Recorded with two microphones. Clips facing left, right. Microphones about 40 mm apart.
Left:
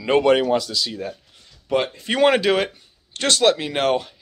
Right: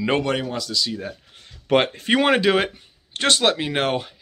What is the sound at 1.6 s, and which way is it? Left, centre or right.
Speech, right.